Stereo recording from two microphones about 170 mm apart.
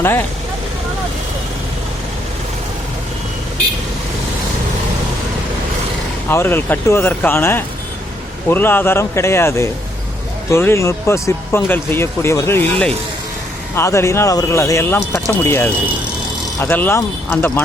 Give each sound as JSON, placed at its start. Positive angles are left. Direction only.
{"t": 0.0, "sound": "speech", "side_deg": 15}
{"t": 6.2, "sound": "speech", "side_deg": 15}